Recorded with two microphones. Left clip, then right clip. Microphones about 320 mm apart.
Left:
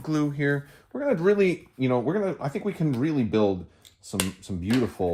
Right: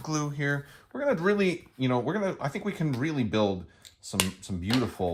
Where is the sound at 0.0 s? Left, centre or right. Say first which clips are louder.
Left 5 dB; centre.